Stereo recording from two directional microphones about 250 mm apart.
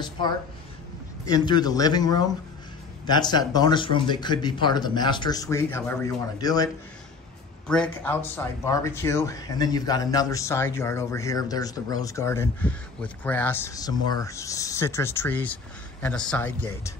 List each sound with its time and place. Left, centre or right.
1.2 s speech: centre
7.6 s speech: centre